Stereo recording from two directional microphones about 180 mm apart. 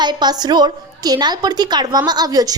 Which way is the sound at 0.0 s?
25° right (ahead or behind).